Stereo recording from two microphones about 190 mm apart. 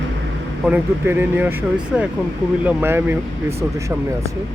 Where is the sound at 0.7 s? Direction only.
10° right (ahead or behind).